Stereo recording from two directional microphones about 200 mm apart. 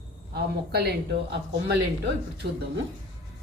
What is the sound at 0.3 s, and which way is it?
Speech, 55° right (ahead or behind).